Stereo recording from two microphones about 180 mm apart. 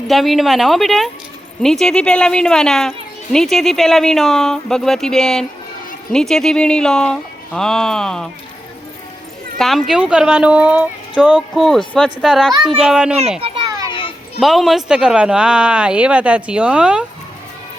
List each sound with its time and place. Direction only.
0.1 s speech: centre (ahead or behind)
9.6 s speech: centre (ahead or behind)
13.4 s children playing: 20° right (ahead or behind)
14.3 s speech: centre (ahead or behind)